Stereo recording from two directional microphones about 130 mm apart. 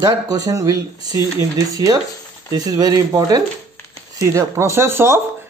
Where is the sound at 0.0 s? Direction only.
25° right (ahead or behind).